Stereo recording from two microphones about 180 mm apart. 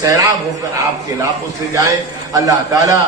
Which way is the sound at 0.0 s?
20° right (ahead or behind).